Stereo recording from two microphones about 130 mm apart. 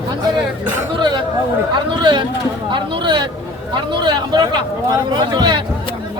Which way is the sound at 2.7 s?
40° right (ahead or behind).